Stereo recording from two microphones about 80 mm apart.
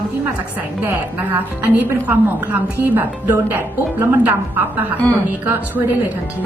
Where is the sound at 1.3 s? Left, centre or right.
Right.